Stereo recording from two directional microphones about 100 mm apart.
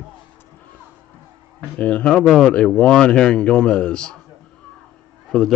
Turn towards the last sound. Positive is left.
turn(degrees=5)  # may be behind; listen again after turning